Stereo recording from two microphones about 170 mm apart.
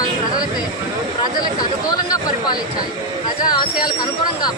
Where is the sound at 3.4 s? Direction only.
25° left (ahead or behind).